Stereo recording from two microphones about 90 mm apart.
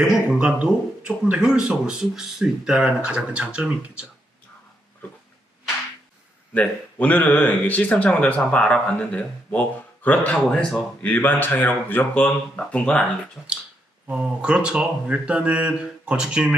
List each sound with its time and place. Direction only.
0.3 s speech: 15° right (ahead or behind)
6.5 s speech: 15° left (ahead or behind)
10.5 s speech: 5° left (ahead or behind)
11.0 s speech: 20° left (ahead or behind)
13.4 s speech: 10° right (ahead or behind)